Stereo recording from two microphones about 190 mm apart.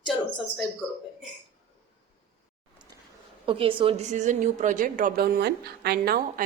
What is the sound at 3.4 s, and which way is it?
Speech, 30° right (ahead or behind).